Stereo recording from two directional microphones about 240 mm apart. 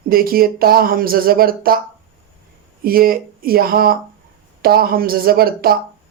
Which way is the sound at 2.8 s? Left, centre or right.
Right.